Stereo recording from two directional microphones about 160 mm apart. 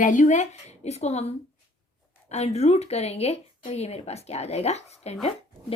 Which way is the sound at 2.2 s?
45° left (ahead or behind).